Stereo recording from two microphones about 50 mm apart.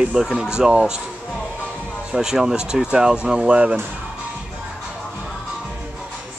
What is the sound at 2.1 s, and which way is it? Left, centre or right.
Speech, centre.